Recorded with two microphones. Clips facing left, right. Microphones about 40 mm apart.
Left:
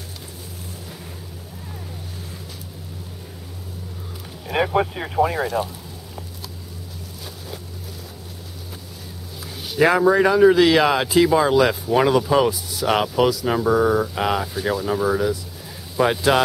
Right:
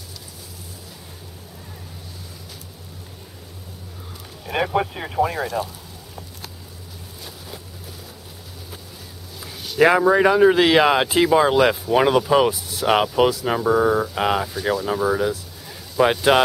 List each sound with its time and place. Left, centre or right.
4.5 s speech: centre
9.8 s speech: centre
11.7 s speech: centre
12.0 s speech: centre